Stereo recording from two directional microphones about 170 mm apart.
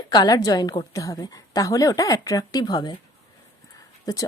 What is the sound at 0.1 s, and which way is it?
Speech, 25° left (ahead or behind).